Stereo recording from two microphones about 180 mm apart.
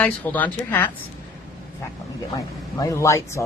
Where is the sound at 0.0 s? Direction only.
10° left (ahead or behind).